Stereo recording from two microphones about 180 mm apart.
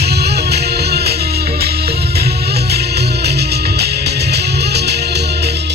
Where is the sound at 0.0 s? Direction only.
65° right (ahead or behind).